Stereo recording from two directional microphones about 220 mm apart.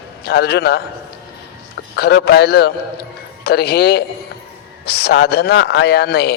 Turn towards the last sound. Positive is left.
turn(degrees=45)  # may be behind; listen again after turning